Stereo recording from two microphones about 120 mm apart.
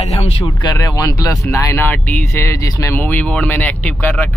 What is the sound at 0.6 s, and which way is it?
Speech, 35° left (ahead or behind).